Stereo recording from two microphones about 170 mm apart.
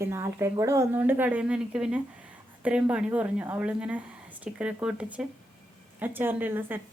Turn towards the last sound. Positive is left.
turn(degrees=-10)  # may be behind; listen again after turning